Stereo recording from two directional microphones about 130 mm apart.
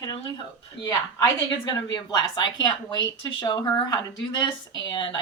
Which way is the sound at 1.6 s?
30° left (ahead or behind).